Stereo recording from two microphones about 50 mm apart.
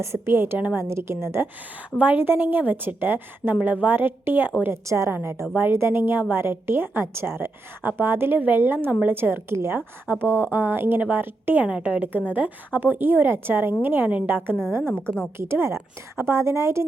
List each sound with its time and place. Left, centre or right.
0.0 s a woman's voice: right
0.8 s a woman's voice: right
2.0 s a woman's voice: right
4.7 s a woman's voice: right
5.5 s a woman's voice: right
10.2 s a woman's voice: left
10.5 s a woman's voice: right
11.6 s a woman's voice: right
14.5 s a woman's voice: centre
15.4 s a woman's voice: right